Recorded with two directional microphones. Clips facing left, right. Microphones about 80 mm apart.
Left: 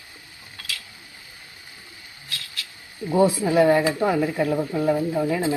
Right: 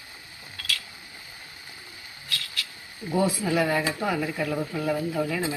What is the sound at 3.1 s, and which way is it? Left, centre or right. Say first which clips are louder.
Speech: left 5 dB; left.